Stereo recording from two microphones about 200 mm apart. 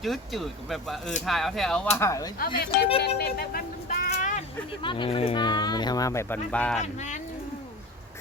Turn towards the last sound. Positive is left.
turn(degrees=35)  # may be behind; listen again after turning